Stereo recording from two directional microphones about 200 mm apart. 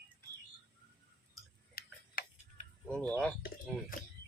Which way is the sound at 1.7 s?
50° left (ahead or behind).